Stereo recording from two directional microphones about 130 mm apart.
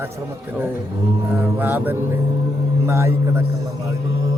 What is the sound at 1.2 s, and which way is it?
Mantra, 20° right (ahead or behind).